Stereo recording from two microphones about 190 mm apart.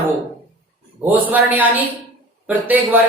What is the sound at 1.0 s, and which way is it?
Speech, 10° right (ahead or behind).